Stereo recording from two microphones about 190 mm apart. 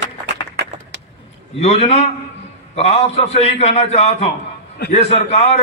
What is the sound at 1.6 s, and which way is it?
A man's voice, 35° left (ahead or behind).